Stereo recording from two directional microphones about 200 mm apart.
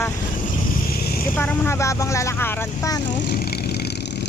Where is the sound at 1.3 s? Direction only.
10° left (ahead or behind).